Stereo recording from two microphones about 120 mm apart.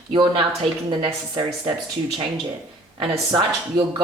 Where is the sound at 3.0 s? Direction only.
40° right (ahead or behind).